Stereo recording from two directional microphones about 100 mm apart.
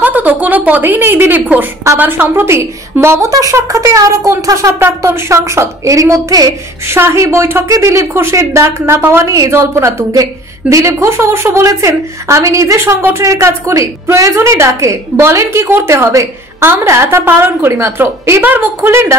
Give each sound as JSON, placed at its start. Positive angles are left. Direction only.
{"t": 0.0, "sound": "a woman's voice", "side_deg": -15}